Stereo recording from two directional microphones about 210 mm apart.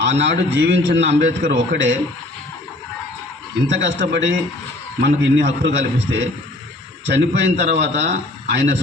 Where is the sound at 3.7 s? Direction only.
60° right (ahead or behind).